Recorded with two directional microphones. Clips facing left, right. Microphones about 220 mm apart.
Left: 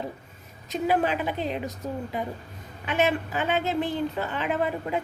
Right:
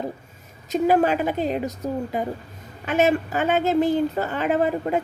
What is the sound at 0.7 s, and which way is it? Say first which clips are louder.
A woman's voice: right 6 dB; 45° right (ahead or behind).